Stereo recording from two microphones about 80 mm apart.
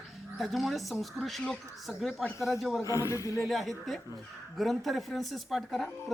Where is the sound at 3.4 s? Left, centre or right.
Centre.